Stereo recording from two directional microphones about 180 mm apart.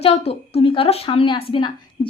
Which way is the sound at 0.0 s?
35° left (ahead or behind).